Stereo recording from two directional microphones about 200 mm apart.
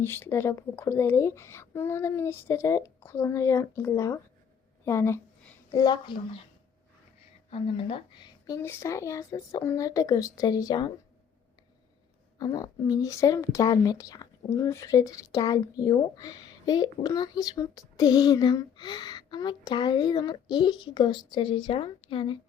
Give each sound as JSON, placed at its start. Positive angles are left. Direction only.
{"t": 0.0, "sound": "a woman's voice", "side_deg": 10}
{"t": 7.5, "sound": "a woman's voice", "side_deg": 25}
{"t": 12.4, "sound": "a woman's voice", "side_deg": 20}